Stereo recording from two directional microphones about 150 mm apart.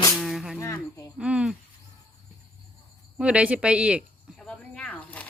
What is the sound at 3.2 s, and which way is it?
Speech, 10° right (ahead or behind).